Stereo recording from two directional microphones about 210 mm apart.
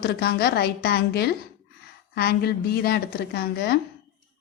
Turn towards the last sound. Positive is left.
turn(degrees=50)  # may be behind; listen again after turning